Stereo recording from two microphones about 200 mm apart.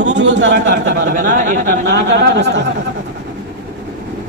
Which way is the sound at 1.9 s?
60° right (ahead or behind).